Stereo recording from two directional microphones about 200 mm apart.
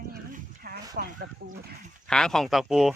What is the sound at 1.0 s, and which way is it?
Chicken, 45° right (ahead or behind).